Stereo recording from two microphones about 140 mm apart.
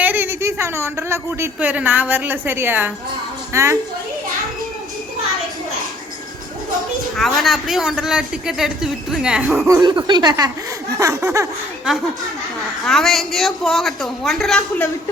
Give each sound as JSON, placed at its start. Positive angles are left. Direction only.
{"t": 0.0, "sound": "a sound", "side_deg": -15}
{"t": 1.5, "sound": "a woman's voice", "side_deg": -10}
{"t": 7.2, "sound": "a man's voice", "side_deg": 0}
{"t": 9.5, "sound": "speech", "side_deg": -20}
{"t": 12.8, "sound": "a man's voice", "side_deg": 5}